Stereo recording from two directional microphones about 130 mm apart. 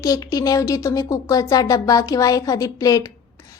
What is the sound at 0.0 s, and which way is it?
A woman's voice, 30° left (ahead or behind).